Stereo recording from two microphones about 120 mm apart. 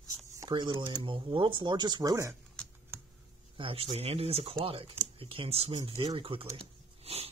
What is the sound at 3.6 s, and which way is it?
Speech, 50° right (ahead or behind).